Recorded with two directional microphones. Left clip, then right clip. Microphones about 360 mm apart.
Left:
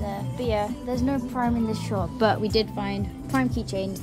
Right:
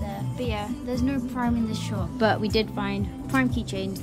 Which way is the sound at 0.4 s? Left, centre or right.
Centre.